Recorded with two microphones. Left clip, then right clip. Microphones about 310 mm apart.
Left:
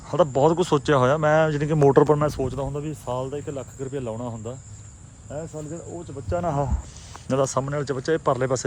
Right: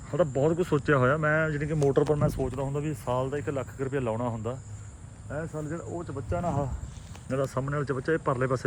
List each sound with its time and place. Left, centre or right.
0.1 s speech: centre; by 2.6 s left
2.6 s speech: centre
6.3 s speech: left
7.3 s speech: centre